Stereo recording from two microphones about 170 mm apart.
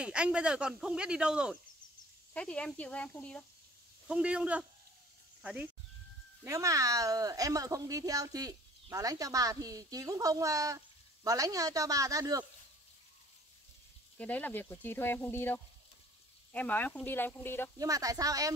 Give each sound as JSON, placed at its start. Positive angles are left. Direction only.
{"t": 0.0, "sound": "speech", "side_deg": -5}
{"t": 2.3, "sound": "speech", "side_deg": 5}
{"t": 4.1, "sound": "speech", "side_deg": -5}
{"t": 6.4, "sound": "speech", "side_deg": -20}
{"t": 14.1, "sound": "speech", "side_deg": 10}
{"t": 17.7, "sound": "speech", "side_deg": -20}